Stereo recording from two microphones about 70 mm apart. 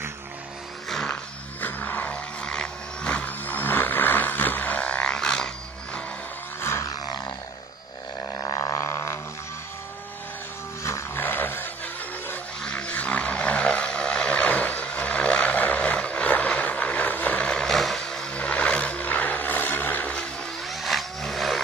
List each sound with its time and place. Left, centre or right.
1.0 s music: left
2.4 s vehicle: centre
6.6 s a sound: left
6.9 s a sound: left
8.3 s a sound: left
8.7 s didgeridoo: left
10.8 s music: left
11.1 s a sound: left
12.6 s vehicle: centre
17.5 s vehicle: centre
18.3 s vehicle: centre
20.6 s vehicle: centre